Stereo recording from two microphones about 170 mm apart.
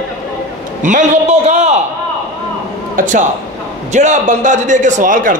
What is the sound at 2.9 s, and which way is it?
A man's voice, 50° right (ahead or behind).